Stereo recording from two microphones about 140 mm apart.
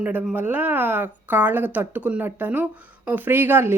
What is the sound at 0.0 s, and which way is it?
Speech, 10° right (ahead or behind).